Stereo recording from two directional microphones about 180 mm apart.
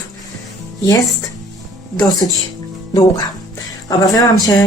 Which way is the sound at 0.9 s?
20° left (ahead or behind).